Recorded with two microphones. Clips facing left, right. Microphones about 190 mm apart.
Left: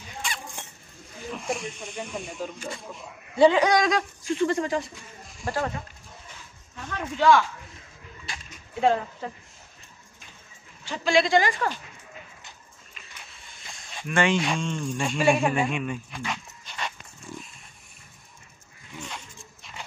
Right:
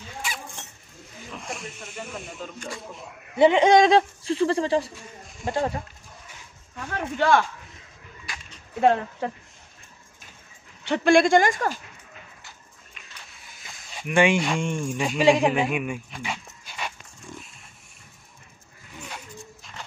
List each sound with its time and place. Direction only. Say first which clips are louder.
0.2 s vehicle: even; 5° right (ahead or behind)
1.4 s speech: left 6 dB; centre (ahead or behind)
3.3 s speech: right 3 dB; 25° right (ahead or behind)
5.4 s speech: right 3 dB; 20° right (ahead or behind)
6.9 s speech: left 1 dB; 55° right (ahead or behind)
8.3 s dog: even; 25° left (ahead or behind)
8.8 s speech: right 3 dB; 60° right (ahead or behind)
10.8 s speech: right 5 dB; 60° right (ahead or behind); by 11.8 s 45° right (ahead or behind)
13.5 s a sound: even; 5° right (ahead or behind)
14.0 s speech: right 3 dB; 15° right (ahead or behind)
15.2 s speech: right 3 dB; 15° right (ahead or behind)
15.5 s speech: right 2 dB; 5° right (ahead or behind)
19.0 s dog: right 2 dB; 5° right (ahead or behind)